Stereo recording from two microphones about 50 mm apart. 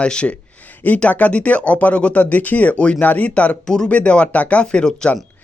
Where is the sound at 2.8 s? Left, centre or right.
Left.